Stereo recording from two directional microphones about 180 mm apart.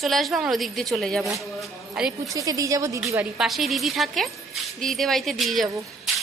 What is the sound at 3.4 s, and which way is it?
A woman's voice, centre (ahead or behind).